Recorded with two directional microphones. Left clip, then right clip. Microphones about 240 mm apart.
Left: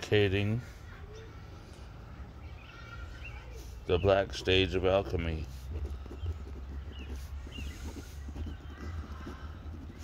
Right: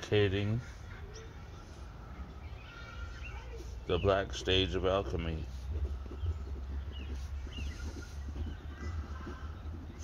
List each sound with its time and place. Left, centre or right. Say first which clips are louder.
0.0 s speech: left 2 dB; left
3.8 s speech: left 4 dB; left